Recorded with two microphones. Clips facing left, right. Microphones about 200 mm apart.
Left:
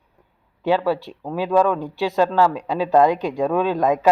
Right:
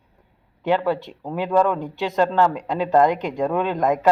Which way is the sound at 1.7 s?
20° right (ahead or behind).